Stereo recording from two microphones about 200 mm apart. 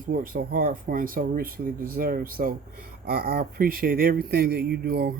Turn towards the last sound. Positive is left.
turn(degrees=-55)  # may be behind; listen again after turning